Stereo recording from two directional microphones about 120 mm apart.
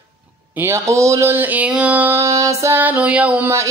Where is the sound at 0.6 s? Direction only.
20° right (ahead or behind).